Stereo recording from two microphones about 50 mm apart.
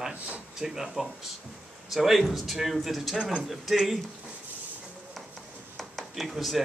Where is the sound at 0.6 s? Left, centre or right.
Centre.